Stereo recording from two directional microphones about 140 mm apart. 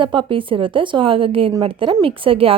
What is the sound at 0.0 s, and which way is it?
A woman's voice, 35° right (ahead or behind).